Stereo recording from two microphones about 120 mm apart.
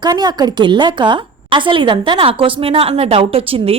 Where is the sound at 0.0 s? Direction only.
35° right (ahead or behind).